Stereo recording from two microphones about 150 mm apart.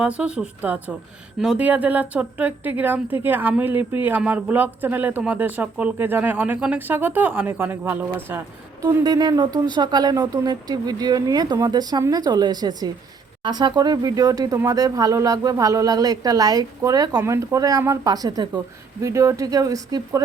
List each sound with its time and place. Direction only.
0.0 s speech: 5° right (ahead or behind); by 20.2 s 25° right (ahead or behind)